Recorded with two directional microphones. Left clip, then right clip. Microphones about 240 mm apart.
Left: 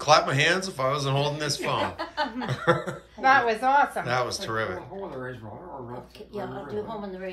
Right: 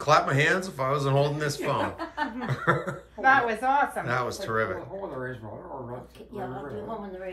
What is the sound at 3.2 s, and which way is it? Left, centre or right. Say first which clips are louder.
Speech: left 1 dB; left.